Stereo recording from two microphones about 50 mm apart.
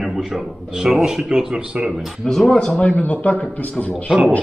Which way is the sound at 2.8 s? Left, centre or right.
Left.